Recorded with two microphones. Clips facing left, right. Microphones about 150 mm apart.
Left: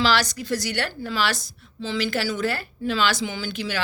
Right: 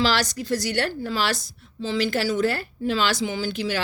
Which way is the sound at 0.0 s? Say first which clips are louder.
Left 1 dB; 40° right (ahead or behind).